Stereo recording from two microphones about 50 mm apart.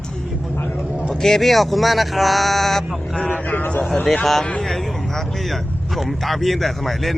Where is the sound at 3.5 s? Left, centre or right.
Left.